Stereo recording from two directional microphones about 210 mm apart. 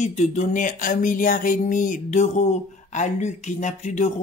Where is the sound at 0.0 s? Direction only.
35° left (ahead or behind).